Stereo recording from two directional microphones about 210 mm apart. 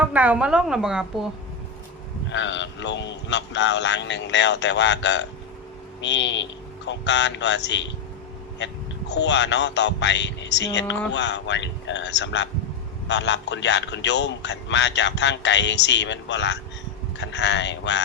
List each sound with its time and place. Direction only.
0.0 s a woman's voice: 5° right (ahead or behind)
2.3 s a man's voice: 60° left (ahead or behind)